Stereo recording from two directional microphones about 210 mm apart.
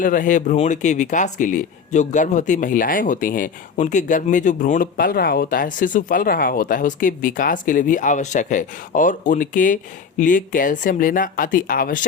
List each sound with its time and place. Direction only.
0.0 s speech: 40° left (ahead or behind)